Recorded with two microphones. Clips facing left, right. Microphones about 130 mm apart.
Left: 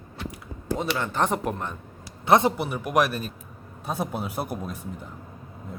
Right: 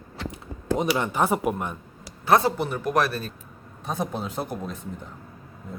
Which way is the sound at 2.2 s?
20° left (ahead or behind).